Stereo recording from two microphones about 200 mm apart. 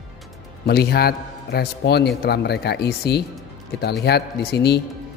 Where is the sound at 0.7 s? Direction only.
50° left (ahead or behind).